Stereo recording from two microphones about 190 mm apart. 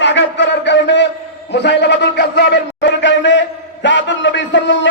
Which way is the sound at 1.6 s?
65° left (ahead or behind).